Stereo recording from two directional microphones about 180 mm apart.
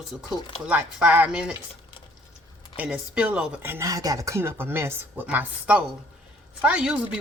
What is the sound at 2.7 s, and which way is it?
Speech, 5° right (ahead or behind).